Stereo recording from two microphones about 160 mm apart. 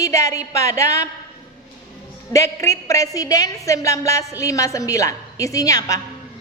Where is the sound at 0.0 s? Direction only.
20° left (ahead or behind).